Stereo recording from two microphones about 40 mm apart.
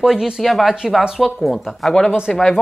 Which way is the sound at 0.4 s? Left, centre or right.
Centre.